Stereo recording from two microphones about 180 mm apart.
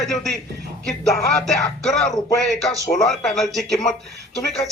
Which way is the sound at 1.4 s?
Centre (ahead or behind).